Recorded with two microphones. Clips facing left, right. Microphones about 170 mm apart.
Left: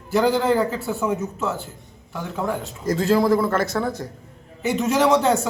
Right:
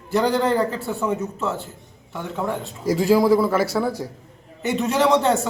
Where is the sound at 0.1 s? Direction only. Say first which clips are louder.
Left 1 dB; centre (ahead or behind).